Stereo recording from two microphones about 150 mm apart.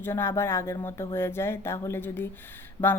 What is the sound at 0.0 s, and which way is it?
Speech, 15° left (ahead or behind).